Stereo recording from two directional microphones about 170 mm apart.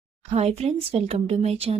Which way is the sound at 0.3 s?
40° right (ahead or behind).